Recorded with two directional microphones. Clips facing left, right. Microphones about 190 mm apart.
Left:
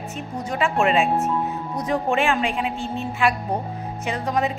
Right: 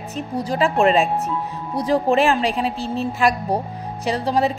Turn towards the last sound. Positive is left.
turn(degrees=-35)  # may be behind; listen again after turning